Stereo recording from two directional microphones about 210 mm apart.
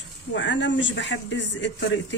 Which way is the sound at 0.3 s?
60° left (ahead or behind).